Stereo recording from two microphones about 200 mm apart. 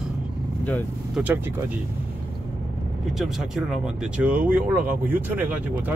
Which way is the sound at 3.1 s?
Centre (ahead or behind).